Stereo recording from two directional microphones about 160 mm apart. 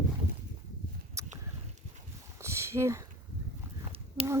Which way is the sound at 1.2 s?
20° right (ahead or behind).